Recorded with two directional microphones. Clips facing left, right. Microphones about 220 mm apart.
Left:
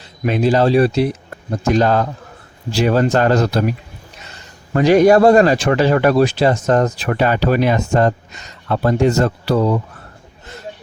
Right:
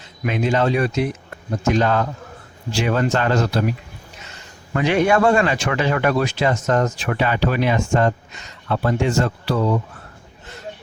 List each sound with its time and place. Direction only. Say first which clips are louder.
0.0 s speech: left 5 dB; 35° left (ahead or behind)
4.7 s speech: left 7 dB; 40° left (ahead or behind)